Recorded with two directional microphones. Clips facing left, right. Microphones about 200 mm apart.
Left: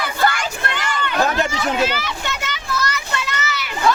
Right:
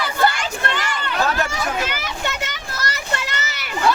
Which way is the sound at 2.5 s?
45° right (ahead or behind).